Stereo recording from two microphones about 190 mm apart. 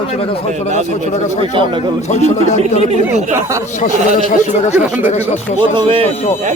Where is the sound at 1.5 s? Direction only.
25° right (ahead or behind).